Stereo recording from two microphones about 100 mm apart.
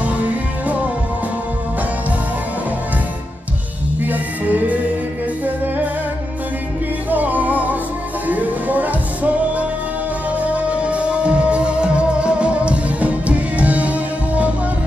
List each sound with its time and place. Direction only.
4.0 s music: 15° right (ahead or behind)
7.1 s music: 15° right (ahead or behind)